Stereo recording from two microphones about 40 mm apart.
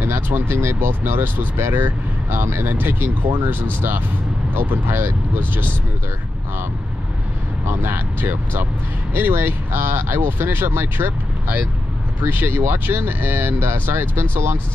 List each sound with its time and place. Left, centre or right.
0.0 s speech: right
1.4 s speech: right
4.6 s speech: right
7.6 s speech: right
9.1 s speech: right
14.2 s speech: right